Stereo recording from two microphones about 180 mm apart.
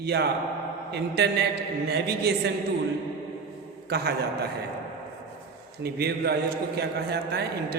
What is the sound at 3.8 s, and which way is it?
Speech, 65° right (ahead or behind).